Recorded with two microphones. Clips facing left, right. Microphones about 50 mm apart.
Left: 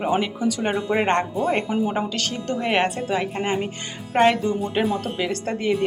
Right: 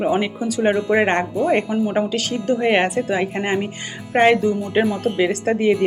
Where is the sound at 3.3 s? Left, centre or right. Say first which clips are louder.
Right 3 dB; right.